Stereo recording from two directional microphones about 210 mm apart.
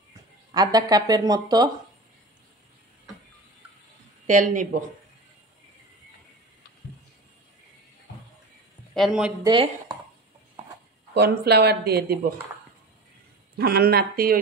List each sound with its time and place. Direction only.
0.5 s speech: 20° right (ahead or behind)
4.3 s speech: 35° right (ahead or behind)
8.9 s speech: centre (ahead or behind)
9.4 s speech: 20° right (ahead or behind)
11.1 s speech: 50° right (ahead or behind)
13.6 s speech: 50° right (ahead or behind)